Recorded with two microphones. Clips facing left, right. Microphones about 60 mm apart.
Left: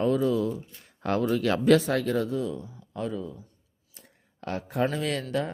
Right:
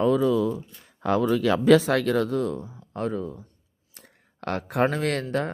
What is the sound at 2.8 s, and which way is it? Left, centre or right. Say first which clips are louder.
Speech: right 4 dB; right.